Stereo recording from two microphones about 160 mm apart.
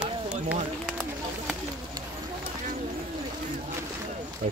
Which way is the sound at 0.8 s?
5° right (ahead or behind).